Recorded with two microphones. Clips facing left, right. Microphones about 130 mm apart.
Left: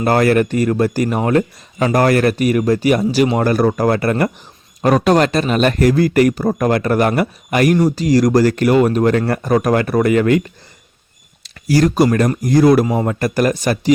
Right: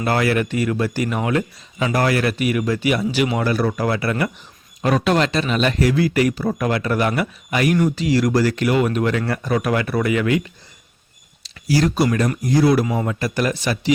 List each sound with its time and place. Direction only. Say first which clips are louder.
0.0 s speech: left 6 dB; 45° left (ahead or behind)
13.1 s speech: left 5 dB; 50° left (ahead or behind)